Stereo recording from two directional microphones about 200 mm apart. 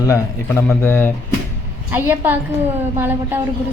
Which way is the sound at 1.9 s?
10° right (ahead or behind).